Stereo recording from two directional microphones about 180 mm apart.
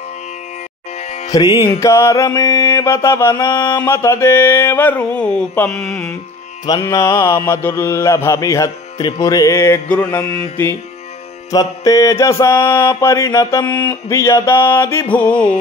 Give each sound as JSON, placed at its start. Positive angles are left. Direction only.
{"t": 0.9, "sound": "music", "side_deg": 40}
{"t": 1.3, "sound": "music", "side_deg": 20}
{"t": 1.7, "sound": "mantra", "side_deg": 15}
{"t": 6.6, "sound": "mantra", "side_deg": 20}
{"t": 11.5, "sound": "mantra", "side_deg": 20}